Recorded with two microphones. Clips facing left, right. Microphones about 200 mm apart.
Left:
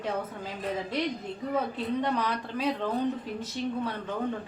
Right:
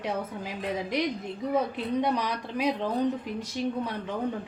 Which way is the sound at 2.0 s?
15° right (ahead or behind).